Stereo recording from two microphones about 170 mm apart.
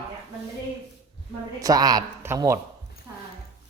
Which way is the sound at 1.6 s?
20° right (ahead or behind).